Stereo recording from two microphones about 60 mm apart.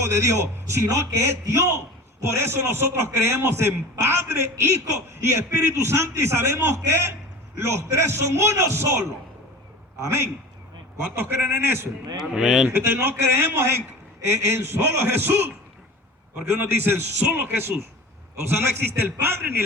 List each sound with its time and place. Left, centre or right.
0.0 s a man's voice: right
11.1 s a man's voice: right
12.1 s speech: centre
12.6 s a man's voice: right
16.5 s a man's voice: right